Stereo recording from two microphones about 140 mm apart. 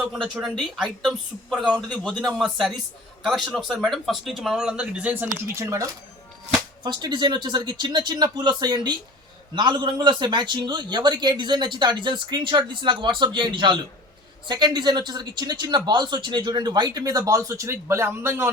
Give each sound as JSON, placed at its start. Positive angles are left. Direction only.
{"t": 0.0, "sound": "speech", "side_deg": -5}
{"t": 1.7, "sound": "speech", "side_deg": 10}
{"t": 6.8, "sound": "a man's voice", "side_deg": -30}